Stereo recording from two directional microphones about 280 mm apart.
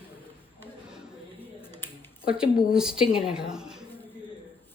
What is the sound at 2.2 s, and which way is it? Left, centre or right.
A woman's voice, centre.